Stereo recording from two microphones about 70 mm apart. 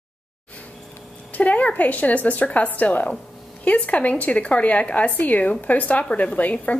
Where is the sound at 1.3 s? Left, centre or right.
Left.